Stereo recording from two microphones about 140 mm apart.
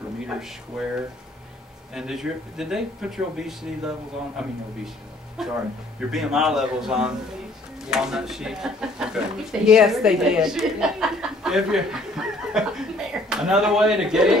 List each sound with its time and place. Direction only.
0.7 s speech: 5° right (ahead or behind)
2.0 s speech: 5° right (ahead or behind)